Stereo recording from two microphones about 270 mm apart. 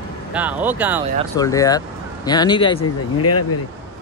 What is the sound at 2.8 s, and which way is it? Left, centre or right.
Speech, left.